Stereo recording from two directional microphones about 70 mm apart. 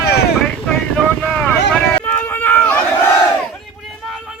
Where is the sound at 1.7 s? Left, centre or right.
Centre.